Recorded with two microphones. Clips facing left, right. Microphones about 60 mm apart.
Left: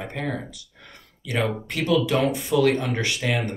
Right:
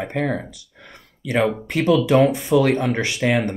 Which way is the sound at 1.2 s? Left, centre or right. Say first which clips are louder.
Right 6 dB; right.